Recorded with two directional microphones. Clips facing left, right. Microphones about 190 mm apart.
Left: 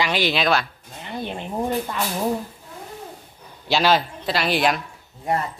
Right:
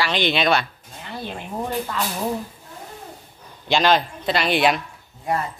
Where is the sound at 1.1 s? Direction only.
20° left (ahead or behind).